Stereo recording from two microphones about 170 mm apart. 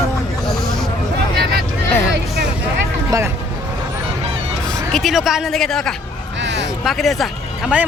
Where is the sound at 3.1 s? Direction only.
20° right (ahead or behind).